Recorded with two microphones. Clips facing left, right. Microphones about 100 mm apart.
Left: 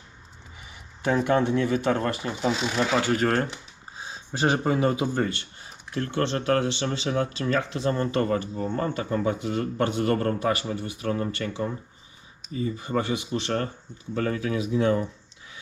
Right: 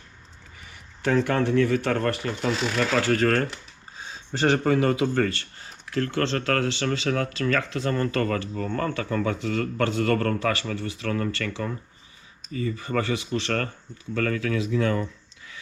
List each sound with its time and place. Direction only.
1.0 s a man's voice: 20° left (ahead or behind)
14.1 s a man's voice: 25° left (ahead or behind)